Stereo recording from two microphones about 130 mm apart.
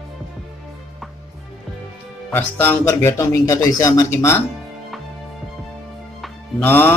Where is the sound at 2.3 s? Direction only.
15° left (ahead or behind).